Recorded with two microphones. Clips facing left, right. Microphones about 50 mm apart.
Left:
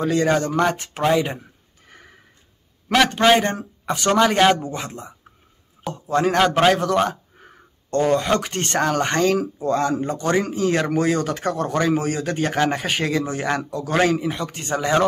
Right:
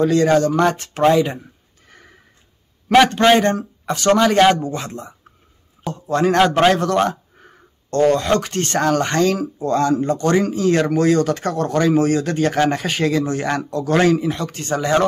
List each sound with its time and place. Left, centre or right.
0.0 s speech: centre
3.3 s a man's voice: centre